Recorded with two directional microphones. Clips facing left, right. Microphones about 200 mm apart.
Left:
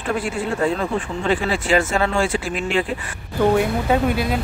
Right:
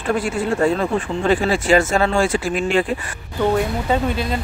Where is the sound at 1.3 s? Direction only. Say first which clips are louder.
Right 3 dB; 45° right (ahead or behind).